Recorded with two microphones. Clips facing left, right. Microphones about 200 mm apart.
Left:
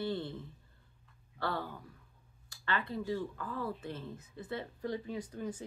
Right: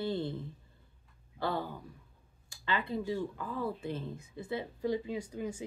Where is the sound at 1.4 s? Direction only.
15° right (ahead or behind).